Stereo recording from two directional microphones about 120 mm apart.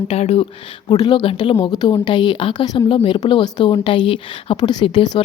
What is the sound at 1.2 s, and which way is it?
A woman's voice, 45° left (ahead or behind).